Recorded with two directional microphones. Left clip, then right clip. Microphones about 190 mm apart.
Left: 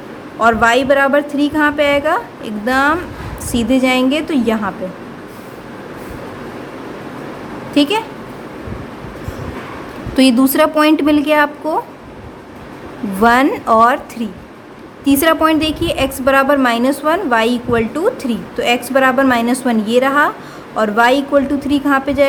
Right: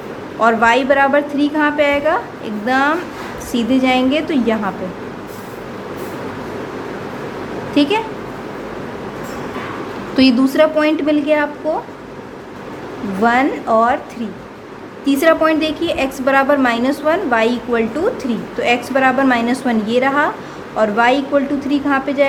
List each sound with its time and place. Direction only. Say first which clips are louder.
0.3 s a woman's voice: left 1 dB; 20° left (ahead or behind)
7.7 s a woman's voice: left 1 dB; 20° left (ahead or behind)
10.2 s a woman's voice: left 1 dB; 25° left (ahead or behind)
13.2 s a woman's voice: left 3 dB; 30° left (ahead or behind)